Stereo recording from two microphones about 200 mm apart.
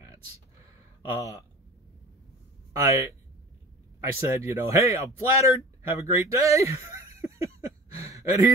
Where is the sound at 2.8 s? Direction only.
15° right (ahead or behind).